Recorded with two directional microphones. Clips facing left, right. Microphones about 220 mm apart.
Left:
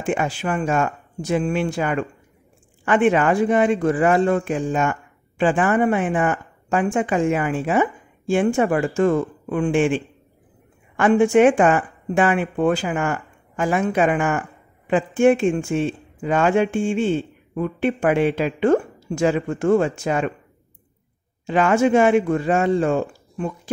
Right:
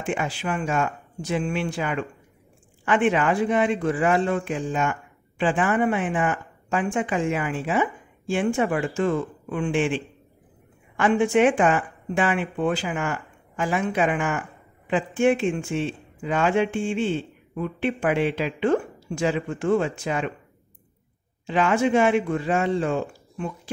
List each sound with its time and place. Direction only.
0.0 s speech: 45° left (ahead or behind)
21.5 s speech: 45° left (ahead or behind)